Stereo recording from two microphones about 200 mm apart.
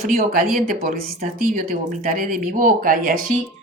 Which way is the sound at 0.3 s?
45° right (ahead or behind).